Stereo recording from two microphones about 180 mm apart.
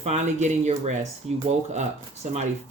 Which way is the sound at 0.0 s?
40° right (ahead or behind).